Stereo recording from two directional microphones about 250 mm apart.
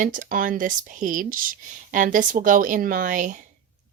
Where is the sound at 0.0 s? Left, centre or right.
Right.